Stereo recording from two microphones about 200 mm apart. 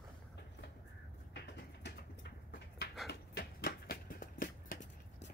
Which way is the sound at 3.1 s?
50° left (ahead or behind).